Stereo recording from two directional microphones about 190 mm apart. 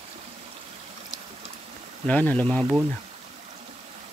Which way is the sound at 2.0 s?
5° left (ahead or behind).